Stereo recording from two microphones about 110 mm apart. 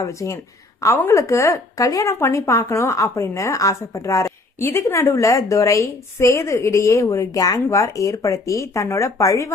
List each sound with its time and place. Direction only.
0.0 s speech: 30° left (ahead or behind)